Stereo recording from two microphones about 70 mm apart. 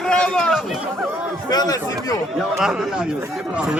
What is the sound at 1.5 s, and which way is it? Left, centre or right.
Speech, left.